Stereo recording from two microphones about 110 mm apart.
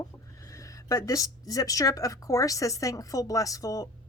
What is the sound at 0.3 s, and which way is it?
Speech, 30° left (ahead or behind).